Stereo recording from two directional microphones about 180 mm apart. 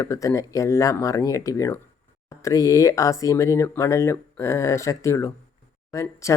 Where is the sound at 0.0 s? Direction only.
15° left (ahead or behind).